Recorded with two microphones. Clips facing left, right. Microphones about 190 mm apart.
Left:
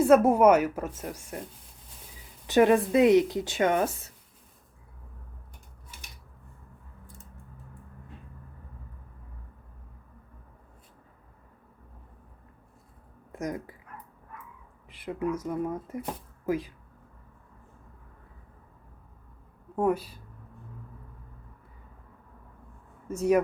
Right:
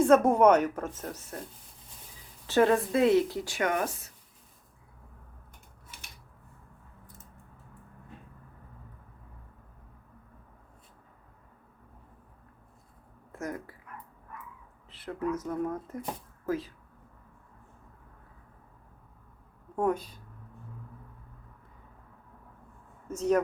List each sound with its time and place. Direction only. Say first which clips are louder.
0.0 s a woman's voice: left 2 dB; 5° left (ahead or behind)
2.5 s speech: left 3 dB; 15° left (ahead or behind)
13.3 s speech: left 3 dB; 15° left (ahead or behind)
14.8 s a woman's voice: left 2 dB; 10° left (ahead or behind)
19.7 s a woman's voice: left 2 dB; 5° left (ahead or behind)
23.0 s a woman's voice: left 3 dB; 10° left (ahead or behind)